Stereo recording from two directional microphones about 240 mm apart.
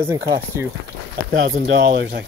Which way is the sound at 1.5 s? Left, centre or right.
Right.